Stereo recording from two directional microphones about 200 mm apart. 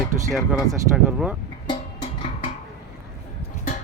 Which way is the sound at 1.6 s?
20° left (ahead or behind).